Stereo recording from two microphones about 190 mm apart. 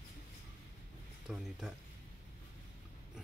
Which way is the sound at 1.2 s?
Centre (ahead or behind).